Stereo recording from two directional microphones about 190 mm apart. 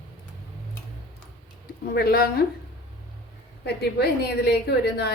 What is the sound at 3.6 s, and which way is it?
Speech, 60° left (ahead or behind).